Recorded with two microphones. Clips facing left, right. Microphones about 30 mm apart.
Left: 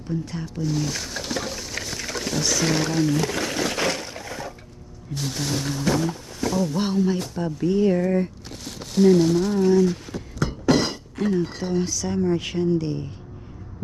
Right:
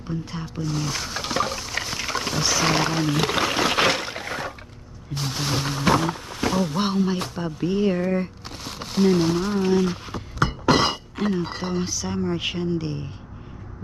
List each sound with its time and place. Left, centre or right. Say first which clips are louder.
0.2 s speech: left 1 dB; centre
3.2 s a sound: right 3 dB; right
5.1 s a sound: right 1 dB; right
5.8 s wild animals: right 4 dB; right
6.8 s speech: even; right
10.4 s thunk: right 2 dB; right
11.1 s speech: left 6 dB; right